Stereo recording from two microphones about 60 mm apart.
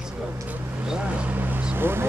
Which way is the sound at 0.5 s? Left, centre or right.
Right.